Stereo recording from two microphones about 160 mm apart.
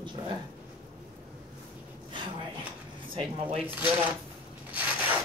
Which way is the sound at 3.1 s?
40° right (ahead or behind).